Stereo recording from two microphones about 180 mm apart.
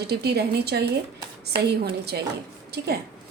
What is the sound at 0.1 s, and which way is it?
A woman's voice, 65° right (ahead or behind).